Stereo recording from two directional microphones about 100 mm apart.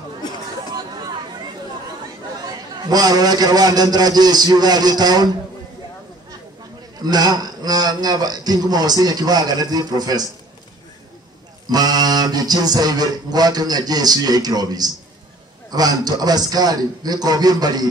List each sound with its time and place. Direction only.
2.8 s a man's voice: 40° right (ahead or behind)
7.0 s a man's voice: 40° right (ahead or behind)
11.7 s a man's voice: 40° right (ahead or behind)